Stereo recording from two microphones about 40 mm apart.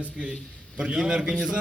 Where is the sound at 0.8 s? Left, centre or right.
Right.